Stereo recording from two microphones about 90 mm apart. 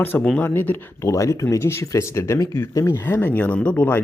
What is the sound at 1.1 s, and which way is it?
Speech, 35° left (ahead or behind).